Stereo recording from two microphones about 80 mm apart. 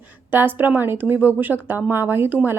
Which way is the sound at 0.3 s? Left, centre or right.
Right.